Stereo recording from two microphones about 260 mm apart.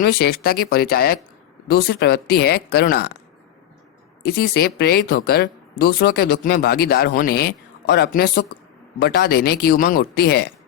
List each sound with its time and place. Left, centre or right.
0.0 s speech: left
4.4 s speech: left